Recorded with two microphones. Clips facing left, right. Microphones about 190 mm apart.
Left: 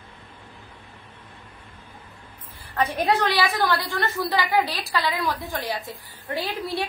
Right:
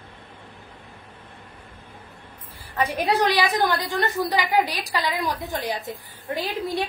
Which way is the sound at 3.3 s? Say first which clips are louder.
Right 1 dB; 20° right (ahead or behind).